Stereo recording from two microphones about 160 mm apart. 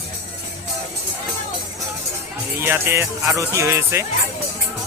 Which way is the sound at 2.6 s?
15° right (ahead or behind).